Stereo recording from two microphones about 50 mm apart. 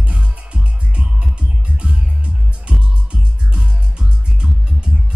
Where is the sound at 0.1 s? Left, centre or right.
Right.